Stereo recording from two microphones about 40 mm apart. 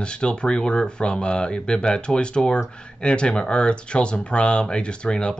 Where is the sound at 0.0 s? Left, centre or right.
Left.